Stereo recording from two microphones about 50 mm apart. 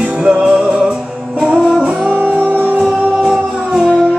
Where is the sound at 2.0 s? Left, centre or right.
Right.